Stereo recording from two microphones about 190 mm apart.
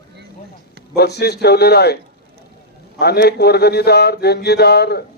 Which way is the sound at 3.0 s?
60° left (ahead or behind).